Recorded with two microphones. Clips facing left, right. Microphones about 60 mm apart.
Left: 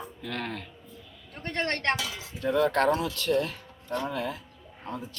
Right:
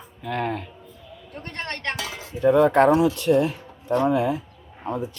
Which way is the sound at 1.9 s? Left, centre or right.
Right.